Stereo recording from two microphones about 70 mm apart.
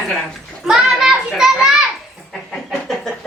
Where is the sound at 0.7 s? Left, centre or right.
Centre.